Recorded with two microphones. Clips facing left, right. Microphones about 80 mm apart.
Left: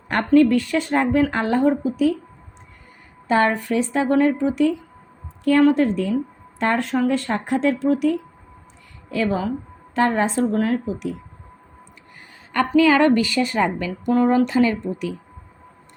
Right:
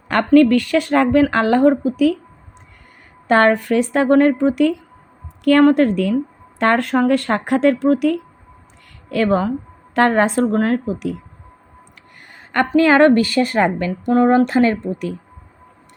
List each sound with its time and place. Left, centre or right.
0.3 s speech: right
3.2 s a woman's voice: right
12.2 s a sound: right
12.7 s a woman's voice: right